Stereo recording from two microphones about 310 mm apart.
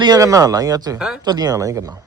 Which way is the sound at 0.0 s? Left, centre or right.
Centre.